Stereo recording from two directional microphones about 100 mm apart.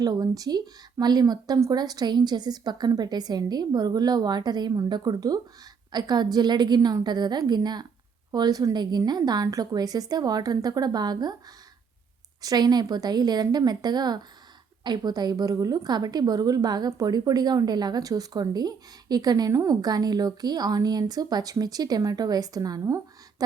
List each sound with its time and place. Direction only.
0.0 s a woman's voice: 40° right (ahead or behind)
12.4 s a woman's voice: 40° right (ahead or behind)